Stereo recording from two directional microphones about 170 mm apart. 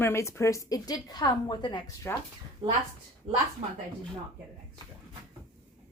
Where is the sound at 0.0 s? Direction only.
15° left (ahead or behind).